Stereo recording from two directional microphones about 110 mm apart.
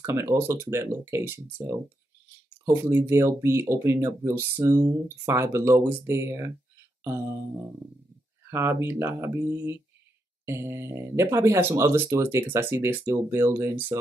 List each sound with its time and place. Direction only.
0.0 s speech: 25° right (ahead or behind)
7.0 s music: 25° right (ahead or behind)
8.5 s speech: 25° right (ahead or behind)